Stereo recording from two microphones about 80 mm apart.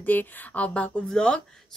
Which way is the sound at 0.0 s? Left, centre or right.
Left.